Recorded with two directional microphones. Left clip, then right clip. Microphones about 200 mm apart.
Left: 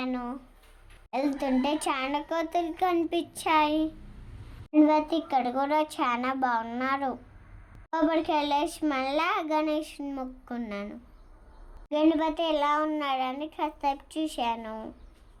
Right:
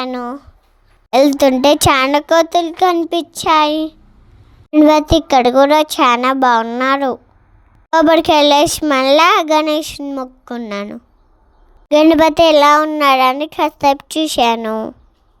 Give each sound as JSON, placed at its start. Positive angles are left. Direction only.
{"t": 0.0, "sound": "a child's voice", "side_deg": -45}